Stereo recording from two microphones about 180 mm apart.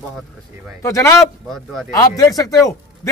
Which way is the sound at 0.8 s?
15° left (ahead or behind).